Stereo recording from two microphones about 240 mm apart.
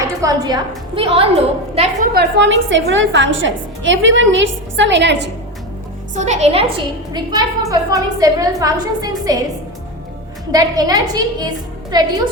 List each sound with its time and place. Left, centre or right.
0.2 s a woman's voice: centre
2.1 s a woman's voice: right
6.1 s a woman's voice: right
10.5 s a woman's voice: centre